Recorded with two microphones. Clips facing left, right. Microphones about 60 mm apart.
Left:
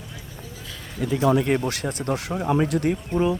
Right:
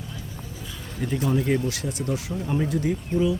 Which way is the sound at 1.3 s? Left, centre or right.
Left.